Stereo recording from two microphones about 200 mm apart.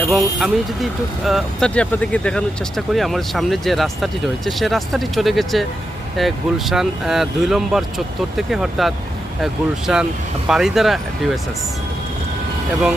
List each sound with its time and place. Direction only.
0.1 s speech: centre (ahead or behind)